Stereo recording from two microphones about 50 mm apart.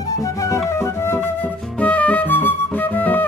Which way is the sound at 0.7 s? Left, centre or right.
Left.